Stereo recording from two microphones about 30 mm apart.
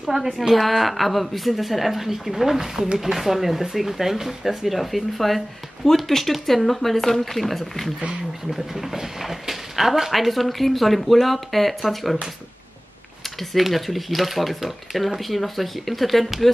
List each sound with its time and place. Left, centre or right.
0.4 s a woman's voice: centre
9.5 s a woman's voice: centre
13.5 s a woman's voice: centre